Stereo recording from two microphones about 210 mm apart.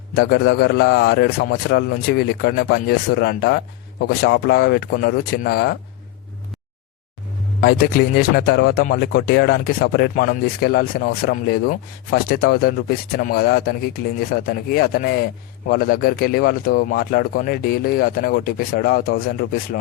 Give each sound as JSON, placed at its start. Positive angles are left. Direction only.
{"t": 0.1, "sound": "speech", "side_deg": 50}
{"t": 7.6, "sound": "speech", "side_deg": 45}